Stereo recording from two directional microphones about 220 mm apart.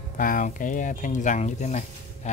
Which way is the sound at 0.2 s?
40° left (ahead or behind).